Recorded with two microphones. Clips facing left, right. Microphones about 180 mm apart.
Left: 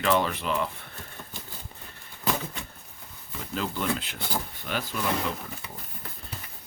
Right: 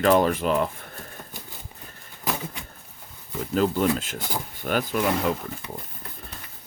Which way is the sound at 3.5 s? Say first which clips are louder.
Right 8 dB; 45° right (ahead or behind).